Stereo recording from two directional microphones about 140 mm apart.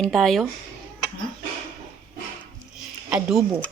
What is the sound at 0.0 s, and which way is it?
Speech, 5° left (ahead or behind).